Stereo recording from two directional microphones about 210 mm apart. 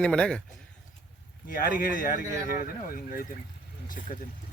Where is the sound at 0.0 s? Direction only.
5° left (ahead or behind).